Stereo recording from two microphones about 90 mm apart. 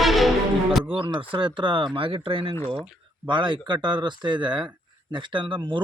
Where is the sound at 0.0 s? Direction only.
Centre (ahead or behind).